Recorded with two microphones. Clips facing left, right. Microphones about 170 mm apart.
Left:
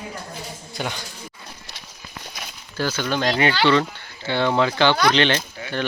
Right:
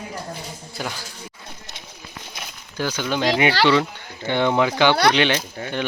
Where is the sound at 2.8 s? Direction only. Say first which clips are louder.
Even; 10° right (ahead or behind).